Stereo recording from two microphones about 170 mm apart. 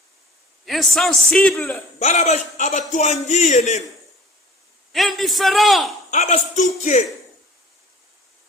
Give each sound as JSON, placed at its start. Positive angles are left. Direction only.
{"t": 0.6, "sound": "a man's voice", "side_deg": 0}
{"t": 2.0, "sound": "speech", "side_deg": 45}
{"t": 4.9, "sound": "a man's voice", "side_deg": 0}
{"t": 6.1, "sound": "speech", "side_deg": 45}